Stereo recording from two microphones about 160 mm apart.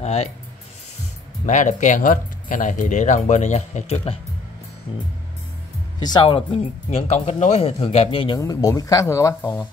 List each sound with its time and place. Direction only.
0.0 s speech: 40° left (ahead or behind)
1.4 s speech: 50° left (ahead or behind)
5.9 s speech: 25° left (ahead or behind)
8.4 s speech: 25° left (ahead or behind)